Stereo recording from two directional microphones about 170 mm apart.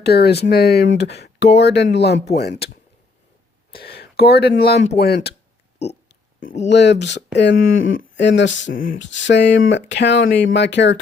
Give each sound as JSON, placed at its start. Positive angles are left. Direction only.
{"t": 0.0, "sound": "speech", "side_deg": 70}
{"t": 3.7, "sound": "speech", "side_deg": 70}
{"t": 6.4, "sound": "speech", "side_deg": 40}
{"t": 6.7, "sound": "speech", "side_deg": 90}
{"t": 7.5, "sound": "speech", "side_deg": 55}
{"t": 8.2, "sound": "speech", "side_deg": 90}
{"t": 8.7, "sound": "speech", "side_deg": 70}
{"t": 9.1, "sound": "speech", "side_deg": 90}